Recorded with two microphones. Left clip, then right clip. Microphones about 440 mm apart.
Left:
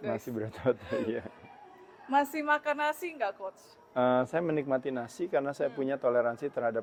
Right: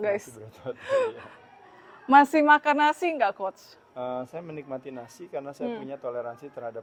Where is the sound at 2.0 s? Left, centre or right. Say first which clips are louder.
Right 10 dB; right.